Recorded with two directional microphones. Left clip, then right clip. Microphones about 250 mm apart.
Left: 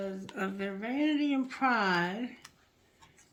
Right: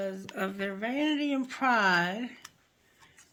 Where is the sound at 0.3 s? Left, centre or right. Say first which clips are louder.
Right 2 dB; right.